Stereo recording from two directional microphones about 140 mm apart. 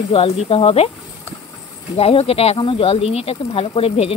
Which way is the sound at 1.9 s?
45° left (ahead or behind).